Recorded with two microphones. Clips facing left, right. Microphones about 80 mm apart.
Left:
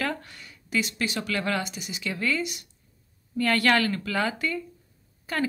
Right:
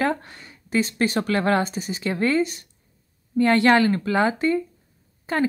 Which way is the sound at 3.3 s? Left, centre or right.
Right.